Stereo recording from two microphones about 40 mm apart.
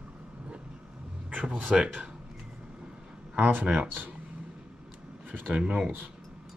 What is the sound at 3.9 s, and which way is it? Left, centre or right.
Speech, right.